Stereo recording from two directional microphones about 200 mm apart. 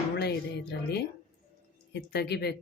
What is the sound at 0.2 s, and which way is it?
Music, 55° left (ahead or behind).